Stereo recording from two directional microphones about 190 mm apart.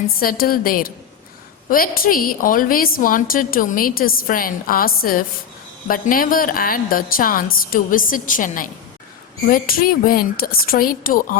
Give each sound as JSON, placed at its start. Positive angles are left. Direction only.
{"t": 0.2, "sound": "a woman's voice", "side_deg": 50}